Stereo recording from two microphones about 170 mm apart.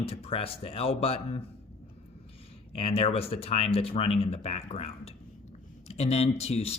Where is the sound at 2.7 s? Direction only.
35° left (ahead or behind).